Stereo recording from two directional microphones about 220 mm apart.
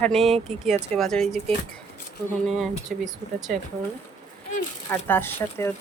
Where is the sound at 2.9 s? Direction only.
40° right (ahead or behind).